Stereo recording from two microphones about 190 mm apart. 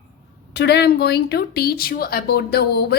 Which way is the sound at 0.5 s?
60° left (ahead or behind).